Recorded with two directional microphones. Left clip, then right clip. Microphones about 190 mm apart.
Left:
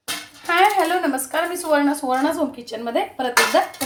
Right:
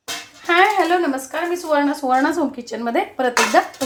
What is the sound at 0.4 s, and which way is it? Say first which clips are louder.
Music: right 1 dB; 25° right (ahead or behind).